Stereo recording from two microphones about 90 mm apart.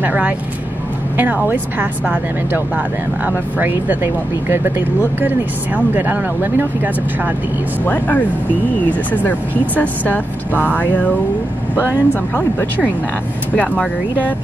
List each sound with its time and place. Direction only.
0.0 s speech: 15° right (ahead or behind)
7.8 s speech: 20° left (ahead or behind)
9.8 s speech: 20° left (ahead or behind)
11.7 s speech: 20° right (ahead or behind)
12.1 s speech: 20° left (ahead or behind)